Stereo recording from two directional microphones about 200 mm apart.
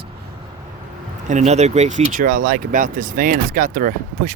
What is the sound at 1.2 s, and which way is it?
Speech, 35° right (ahead or behind).